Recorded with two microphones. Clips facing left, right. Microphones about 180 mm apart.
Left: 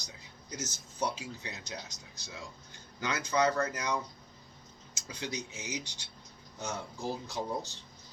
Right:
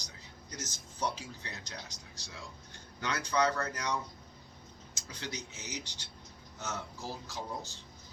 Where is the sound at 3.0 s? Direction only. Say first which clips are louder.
Left 2 dB; 10° left (ahead or behind).